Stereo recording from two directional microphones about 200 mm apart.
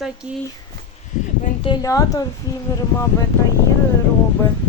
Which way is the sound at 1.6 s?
15° left (ahead or behind).